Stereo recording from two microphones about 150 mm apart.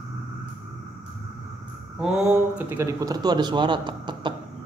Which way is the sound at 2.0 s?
5° right (ahead or behind).